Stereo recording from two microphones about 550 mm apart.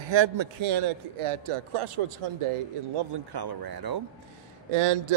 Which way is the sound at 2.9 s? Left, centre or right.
Right.